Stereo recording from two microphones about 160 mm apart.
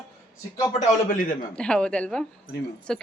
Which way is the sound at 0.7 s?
55° left (ahead or behind).